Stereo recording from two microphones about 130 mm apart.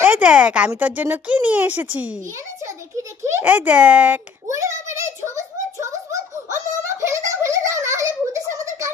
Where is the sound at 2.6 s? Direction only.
20° right (ahead or behind).